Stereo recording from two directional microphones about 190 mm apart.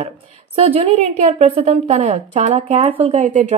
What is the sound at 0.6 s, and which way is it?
A woman's voice, 30° right (ahead or behind).